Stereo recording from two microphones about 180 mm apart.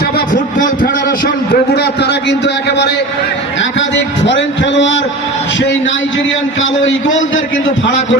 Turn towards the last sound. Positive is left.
turn(degrees=90)